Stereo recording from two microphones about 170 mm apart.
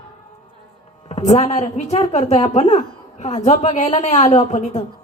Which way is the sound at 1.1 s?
40° left (ahead or behind).